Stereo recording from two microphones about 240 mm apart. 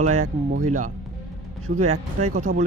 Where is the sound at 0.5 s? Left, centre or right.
Right.